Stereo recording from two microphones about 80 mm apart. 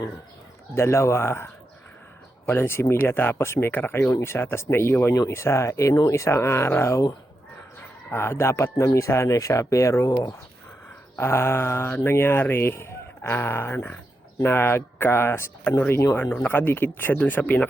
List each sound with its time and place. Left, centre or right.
0.7 s speech: left
2.5 s speech: left
5.1 s speech: left
8.1 s speech: left
11.2 s speech: left